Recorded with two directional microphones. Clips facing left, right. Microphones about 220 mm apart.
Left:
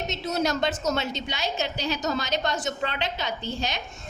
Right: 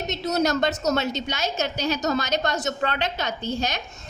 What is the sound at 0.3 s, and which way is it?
A woman's voice, 40° right (ahead or behind).